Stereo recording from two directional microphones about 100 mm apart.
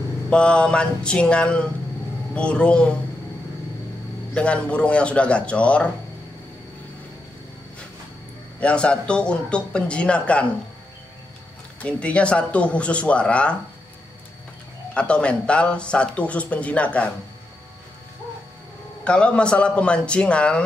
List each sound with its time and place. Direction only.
0.3 s speech: 10° left (ahead or behind)
4.3 s speech: 10° left (ahead or behind)
8.5 s speech: 10° left (ahead or behind)
11.8 s speech: 10° left (ahead or behind)
15.0 s speech: 10° left (ahead or behind)
19.0 s speech: 10° left (ahead or behind)